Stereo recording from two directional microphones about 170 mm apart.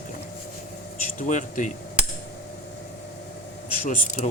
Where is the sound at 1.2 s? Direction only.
45° left (ahead or behind).